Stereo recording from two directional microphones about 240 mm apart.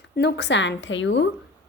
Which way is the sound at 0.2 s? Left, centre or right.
Left.